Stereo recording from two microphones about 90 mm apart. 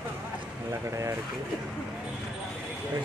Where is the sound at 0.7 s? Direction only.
35° right (ahead or behind).